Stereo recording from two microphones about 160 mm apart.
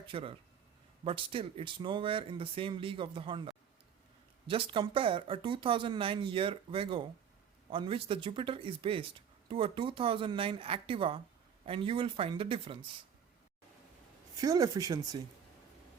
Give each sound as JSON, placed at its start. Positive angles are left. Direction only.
{"t": 0.1, "sound": "speech", "side_deg": -35}
{"t": 14.4, "sound": "speech", "side_deg": -20}